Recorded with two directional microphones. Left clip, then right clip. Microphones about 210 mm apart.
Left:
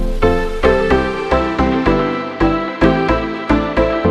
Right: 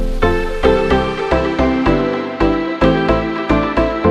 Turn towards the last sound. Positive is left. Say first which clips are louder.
# even
turn(degrees=0)  # may be behind; listen again after turning